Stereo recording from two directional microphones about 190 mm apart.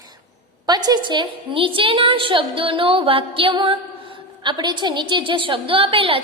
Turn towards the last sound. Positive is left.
turn(degrees=-30)  # may be behind; listen again after turning